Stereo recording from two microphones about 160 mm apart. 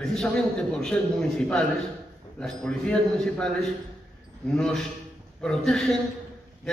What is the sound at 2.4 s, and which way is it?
A man's voice, 5° left (ahead or behind).